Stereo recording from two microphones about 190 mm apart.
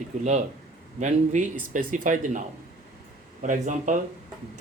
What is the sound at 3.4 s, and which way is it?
Speech, 40° right (ahead or behind).